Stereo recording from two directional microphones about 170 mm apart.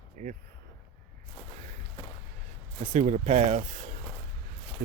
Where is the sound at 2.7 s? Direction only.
45° right (ahead or behind).